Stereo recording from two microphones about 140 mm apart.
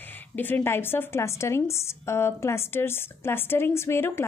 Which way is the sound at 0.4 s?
15° left (ahead or behind).